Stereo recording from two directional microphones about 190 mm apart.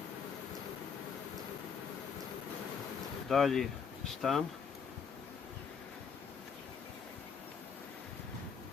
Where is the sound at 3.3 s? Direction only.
Centre (ahead or behind).